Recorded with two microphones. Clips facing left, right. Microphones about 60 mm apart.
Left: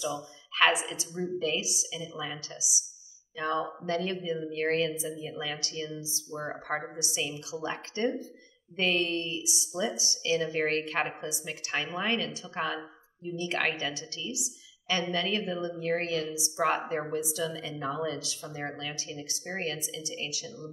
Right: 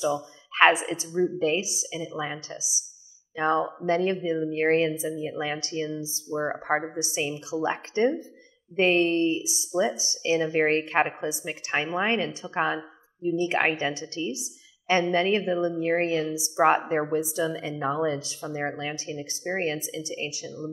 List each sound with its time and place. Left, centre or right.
0.0 s a woman's voice: right